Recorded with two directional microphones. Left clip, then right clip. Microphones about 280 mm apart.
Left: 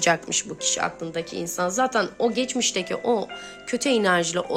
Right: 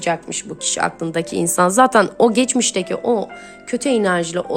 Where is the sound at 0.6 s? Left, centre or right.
Centre.